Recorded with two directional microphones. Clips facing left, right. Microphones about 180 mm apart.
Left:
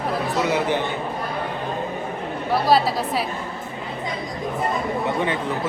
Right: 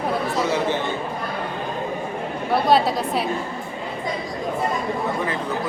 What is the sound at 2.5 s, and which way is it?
Speech, centre (ahead or behind).